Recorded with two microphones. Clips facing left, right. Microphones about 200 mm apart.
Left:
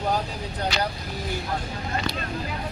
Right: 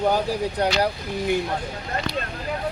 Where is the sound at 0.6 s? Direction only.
70° right (ahead or behind).